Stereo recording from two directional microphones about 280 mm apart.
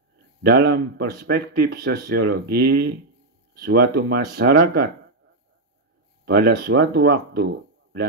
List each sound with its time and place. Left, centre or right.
0.4 s speech: right
6.2 s speech: right